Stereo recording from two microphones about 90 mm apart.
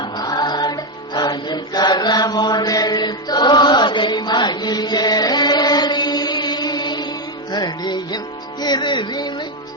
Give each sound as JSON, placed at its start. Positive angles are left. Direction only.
{"t": 0.0, "sound": "music", "side_deg": 50}